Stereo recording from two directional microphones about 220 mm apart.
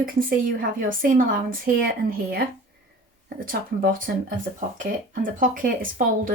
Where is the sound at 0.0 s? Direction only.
40° right (ahead or behind).